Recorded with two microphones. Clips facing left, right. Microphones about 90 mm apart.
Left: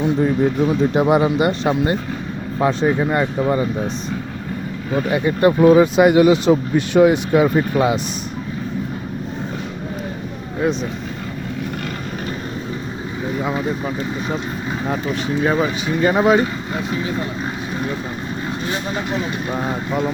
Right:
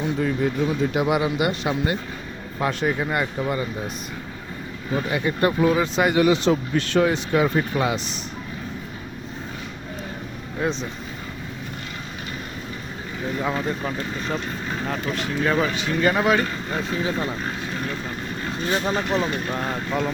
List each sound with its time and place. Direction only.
0.0 s speech: 25° left (ahead or behind)
2.6 s speech: 25° left (ahead or behind)
5.1 s speech: 25° left (ahead or behind)
13.4 s speech: 10° left (ahead or behind)
19.3 s speech: 15° left (ahead or behind)